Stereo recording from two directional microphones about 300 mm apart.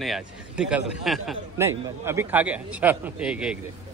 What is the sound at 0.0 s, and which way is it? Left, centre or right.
A man's voice, centre.